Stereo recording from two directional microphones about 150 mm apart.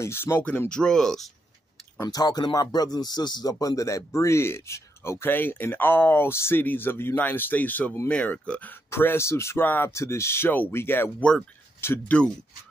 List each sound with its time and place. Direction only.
0.0 s speech: 15° left (ahead or behind)
2.0 s speech: 25° left (ahead or behind)